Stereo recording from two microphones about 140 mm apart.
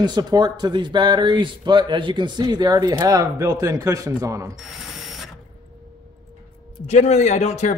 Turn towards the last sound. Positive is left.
turn(degrees=55)  # may be behind; listen again after turning